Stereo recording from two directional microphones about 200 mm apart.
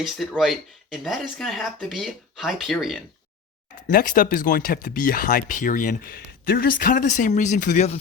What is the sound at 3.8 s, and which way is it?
Speech, 45° left (ahead or behind).